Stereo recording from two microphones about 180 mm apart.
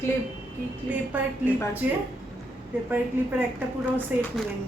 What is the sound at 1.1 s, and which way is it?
Speech, 10° right (ahead or behind).